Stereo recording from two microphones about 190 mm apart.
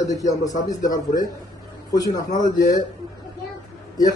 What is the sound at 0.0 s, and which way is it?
A man's voice, 15° left (ahead or behind).